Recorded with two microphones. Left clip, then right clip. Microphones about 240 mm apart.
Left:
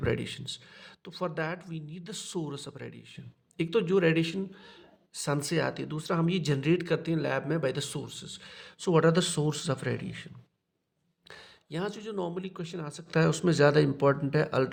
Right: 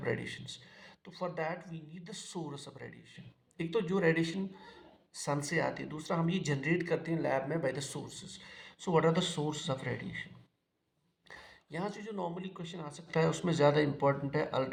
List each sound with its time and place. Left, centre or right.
0.0 s speech: left
11.3 s speech: left